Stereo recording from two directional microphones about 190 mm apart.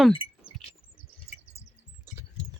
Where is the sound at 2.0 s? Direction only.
15° right (ahead or behind).